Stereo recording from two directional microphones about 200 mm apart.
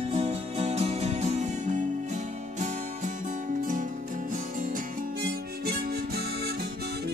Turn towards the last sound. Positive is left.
turn(degrees=-50)  # may be behind; listen again after turning